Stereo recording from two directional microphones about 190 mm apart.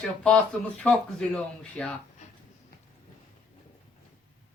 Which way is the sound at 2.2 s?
40° left (ahead or behind).